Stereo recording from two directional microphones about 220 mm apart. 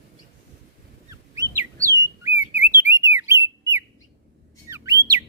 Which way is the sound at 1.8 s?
10° right (ahead or behind).